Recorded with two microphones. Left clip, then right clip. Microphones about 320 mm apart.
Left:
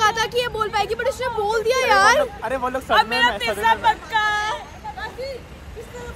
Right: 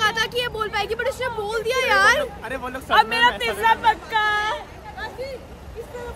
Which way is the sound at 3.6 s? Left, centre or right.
Centre.